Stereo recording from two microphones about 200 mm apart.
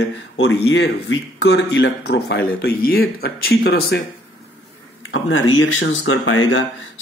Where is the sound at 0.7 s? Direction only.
65° left (ahead or behind).